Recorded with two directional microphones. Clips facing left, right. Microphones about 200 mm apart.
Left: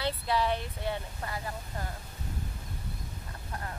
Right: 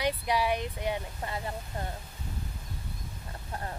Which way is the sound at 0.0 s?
15° right (ahead or behind).